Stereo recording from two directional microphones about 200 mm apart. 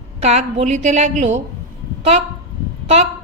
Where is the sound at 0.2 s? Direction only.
30° right (ahead or behind).